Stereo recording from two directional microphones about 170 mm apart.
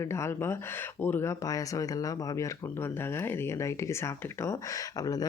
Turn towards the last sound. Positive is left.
turn(degrees=20)  # may be behind; listen again after turning